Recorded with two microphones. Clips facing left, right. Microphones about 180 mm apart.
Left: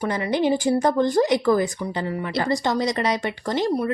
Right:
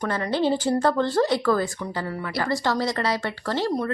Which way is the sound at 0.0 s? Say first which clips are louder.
Left 2 dB; 15° left (ahead or behind).